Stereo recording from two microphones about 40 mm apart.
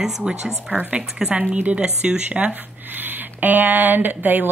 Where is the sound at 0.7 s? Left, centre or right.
Right.